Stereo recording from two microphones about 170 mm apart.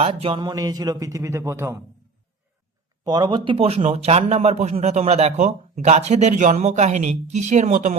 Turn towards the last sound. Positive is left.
turn(degrees=-50)  # may be behind; listen again after turning